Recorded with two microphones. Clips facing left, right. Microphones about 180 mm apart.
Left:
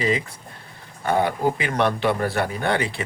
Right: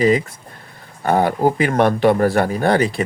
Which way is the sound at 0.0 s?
45° right (ahead or behind).